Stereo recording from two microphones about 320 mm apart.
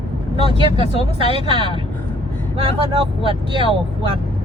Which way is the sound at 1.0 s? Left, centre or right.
Centre.